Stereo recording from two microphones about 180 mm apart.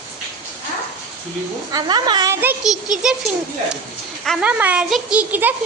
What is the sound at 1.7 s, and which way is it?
Speech, 25° right (ahead or behind).